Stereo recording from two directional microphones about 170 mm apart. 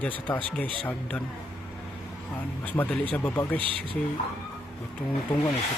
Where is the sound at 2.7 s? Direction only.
10° left (ahead or behind).